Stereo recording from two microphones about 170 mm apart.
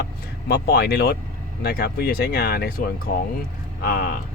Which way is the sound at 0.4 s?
70° left (ahead or behind).